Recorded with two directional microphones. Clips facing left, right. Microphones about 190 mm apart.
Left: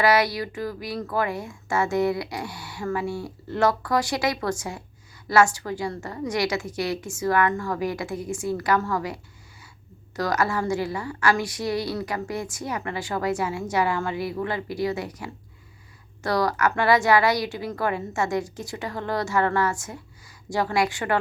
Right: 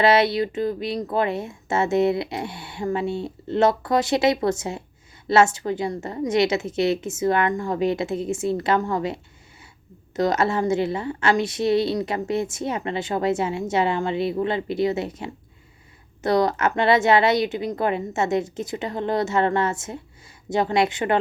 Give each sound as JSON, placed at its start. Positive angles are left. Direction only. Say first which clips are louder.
{"t": 0.0, "sound": "a woman's voice", "louder": "right 3 dB", "side_deg": -25}